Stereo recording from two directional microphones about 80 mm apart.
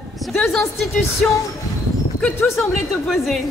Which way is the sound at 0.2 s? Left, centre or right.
Centre.